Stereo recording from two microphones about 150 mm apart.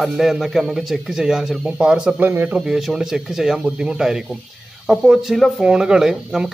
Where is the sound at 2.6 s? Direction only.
5° right (ahead or behind).